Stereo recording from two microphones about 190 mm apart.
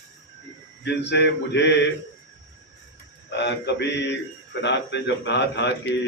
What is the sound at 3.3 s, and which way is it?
A man's voice, 65° left (ahead or behind).